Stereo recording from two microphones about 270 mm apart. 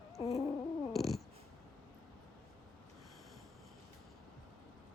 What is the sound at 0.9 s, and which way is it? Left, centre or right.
Cat, centre.